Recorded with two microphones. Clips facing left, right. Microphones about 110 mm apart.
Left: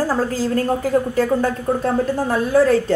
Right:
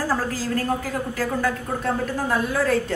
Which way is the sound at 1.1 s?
30° left (ahead or behind).